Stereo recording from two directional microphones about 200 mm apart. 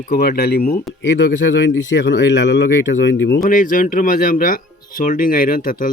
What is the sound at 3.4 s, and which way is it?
Speech, 45° left (ahead or behind).